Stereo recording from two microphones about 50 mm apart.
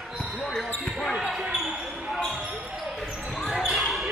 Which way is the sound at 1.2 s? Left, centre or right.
Centre.